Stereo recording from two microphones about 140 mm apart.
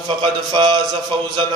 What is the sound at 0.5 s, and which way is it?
Mantra, 35° right (ahead or behind).